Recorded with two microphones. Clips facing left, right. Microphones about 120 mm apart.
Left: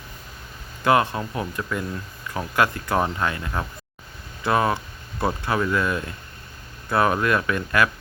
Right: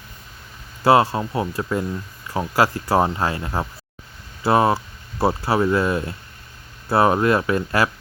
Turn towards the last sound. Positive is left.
turn(degrees=-30)  # may be behind; listen again after turning